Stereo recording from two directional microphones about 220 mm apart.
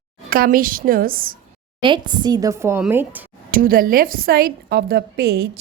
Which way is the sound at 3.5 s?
40° right (ahead or behind).